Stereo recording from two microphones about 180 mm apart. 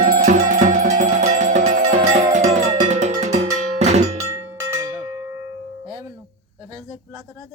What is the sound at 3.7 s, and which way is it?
Cowbell, 40° right (ahead or behind).